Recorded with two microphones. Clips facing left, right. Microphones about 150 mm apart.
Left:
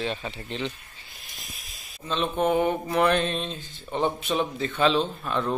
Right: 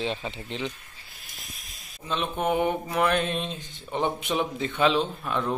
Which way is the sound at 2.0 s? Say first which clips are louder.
Left 3 dB; 10° right (ahead or behind).